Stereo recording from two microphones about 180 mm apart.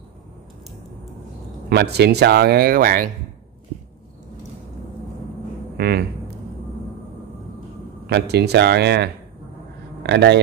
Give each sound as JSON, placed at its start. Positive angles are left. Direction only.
{"t": 1.7, "sound": "speech", "side_deg": -65}
{"t": 5.8, "sound": "speech", "side_deg": -60}
{"t": 8.1, "sound": "a man's voice", "side_deg": -65}